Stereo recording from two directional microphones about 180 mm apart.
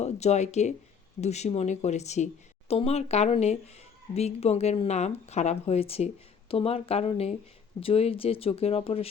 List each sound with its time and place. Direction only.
0.0 s speech: 40° left (ahead or behind)